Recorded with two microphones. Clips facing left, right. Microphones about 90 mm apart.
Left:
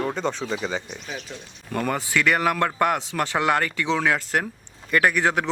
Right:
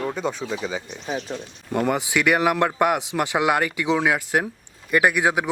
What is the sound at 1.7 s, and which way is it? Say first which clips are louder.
Speech: right 2 dB; 15° right (ahead or behind).